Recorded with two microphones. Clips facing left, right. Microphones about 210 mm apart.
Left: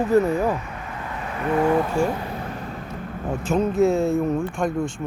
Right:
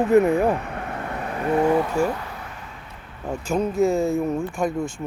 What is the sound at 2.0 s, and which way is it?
Speech, 10° left (ahead or behind).